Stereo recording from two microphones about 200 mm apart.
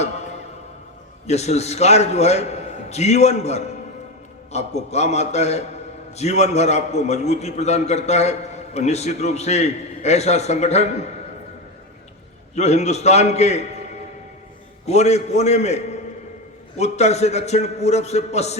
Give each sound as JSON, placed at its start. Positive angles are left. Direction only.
{"t": 1.3, "sound": "a man's voice", "side_deg": 35}
{"t": 12.5, "sound": "a man's voice", "side_deg": 35}
{"t": 14.8, "sound": "a man's voice", "side_deg": 35}